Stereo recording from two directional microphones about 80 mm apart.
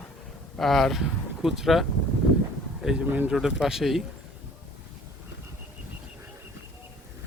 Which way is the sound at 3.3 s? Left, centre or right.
Centre.